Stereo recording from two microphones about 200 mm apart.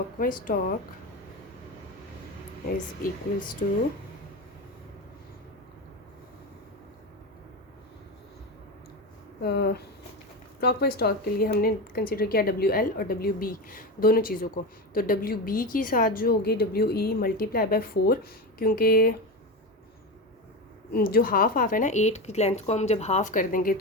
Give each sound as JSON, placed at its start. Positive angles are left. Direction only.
{"t": 0.2, "sound": "speech", "side_deg": 45}
{"t": 3.6, "sound": "speech", "side_deg": 35}
{"t": 9.4, "sound": "speech", "side_deg": 55}
{"t": 20.9, "sound": "speech", "side_deg": 50}